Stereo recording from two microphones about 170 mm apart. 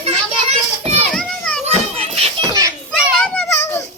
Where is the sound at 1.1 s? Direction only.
5° left (ahead or behind).